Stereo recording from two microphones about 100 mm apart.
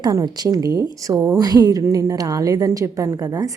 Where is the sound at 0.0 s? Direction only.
40° right (ahead or behind).